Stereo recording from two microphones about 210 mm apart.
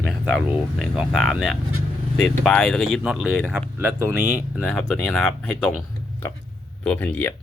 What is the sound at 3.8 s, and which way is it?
Speech, 10° right (ahead or behind).